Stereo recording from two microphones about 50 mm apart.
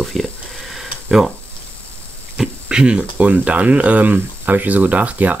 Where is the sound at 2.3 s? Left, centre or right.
Centre.